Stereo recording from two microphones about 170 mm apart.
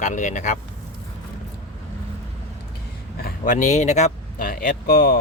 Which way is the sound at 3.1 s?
65° left (ahead or behind).